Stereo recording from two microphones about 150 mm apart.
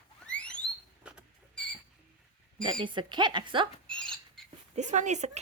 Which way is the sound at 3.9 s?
5° left (ahead or behind).